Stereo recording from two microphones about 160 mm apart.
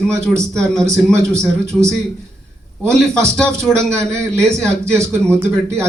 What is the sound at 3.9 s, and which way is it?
Speech, 15° right (ahead or behind).